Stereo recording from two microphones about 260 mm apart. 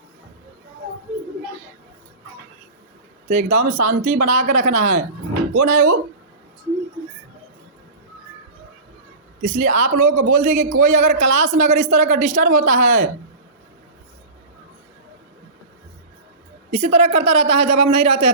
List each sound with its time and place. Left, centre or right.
3.2 s a man's voice: right
9.4 s a man's voice: right
16.7 s a man's voice: right